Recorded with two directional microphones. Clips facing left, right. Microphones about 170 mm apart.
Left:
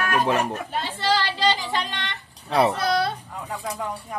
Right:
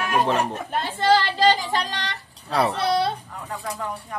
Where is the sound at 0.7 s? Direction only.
50° right (ahead or behind).